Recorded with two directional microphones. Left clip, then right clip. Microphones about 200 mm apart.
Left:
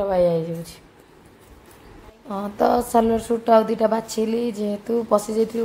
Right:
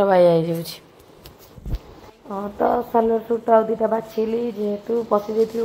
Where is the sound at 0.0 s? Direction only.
25° right (ahead or behind).